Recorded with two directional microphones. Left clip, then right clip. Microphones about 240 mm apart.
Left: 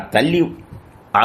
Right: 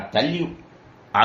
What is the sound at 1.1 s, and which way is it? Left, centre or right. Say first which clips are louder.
Speech: left 3 dB; left.